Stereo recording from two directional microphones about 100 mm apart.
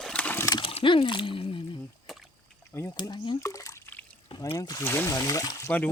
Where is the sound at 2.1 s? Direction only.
Centre (ahead or behind).